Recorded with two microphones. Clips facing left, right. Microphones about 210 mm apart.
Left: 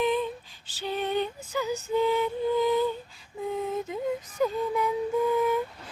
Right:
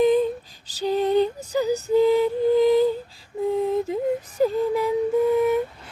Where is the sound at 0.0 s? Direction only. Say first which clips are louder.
Right 8 dB; 40° right (ahead or behind).